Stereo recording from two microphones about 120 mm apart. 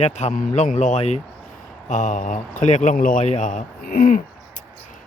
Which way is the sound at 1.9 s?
90° left.